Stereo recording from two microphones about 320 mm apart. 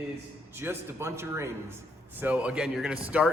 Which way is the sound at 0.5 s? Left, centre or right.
Centre.